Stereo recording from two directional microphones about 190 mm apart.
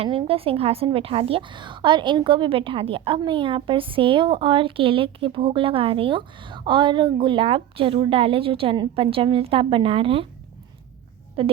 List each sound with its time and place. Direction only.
0.0 s a woman's voice: 30° right (ahead or behind)
11.4 s a woman's voice: 30° right (ahead or behind)